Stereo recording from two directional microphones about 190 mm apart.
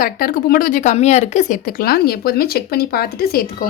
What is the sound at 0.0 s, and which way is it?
Speech, 50° left (ahead or behind).